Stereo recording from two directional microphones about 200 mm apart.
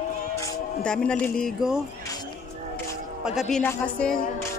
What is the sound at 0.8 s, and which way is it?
Speech, 5° left (ahead or behind).